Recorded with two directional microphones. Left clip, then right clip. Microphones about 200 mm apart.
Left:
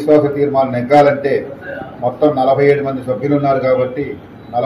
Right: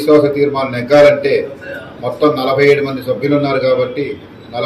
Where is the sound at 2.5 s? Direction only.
20° right (ahead or behind).